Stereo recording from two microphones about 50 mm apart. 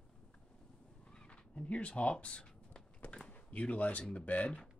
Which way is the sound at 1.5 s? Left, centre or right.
Left.